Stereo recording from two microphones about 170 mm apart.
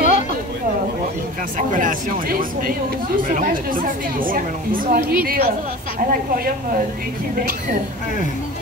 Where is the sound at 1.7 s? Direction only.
50° right (ahead or behind).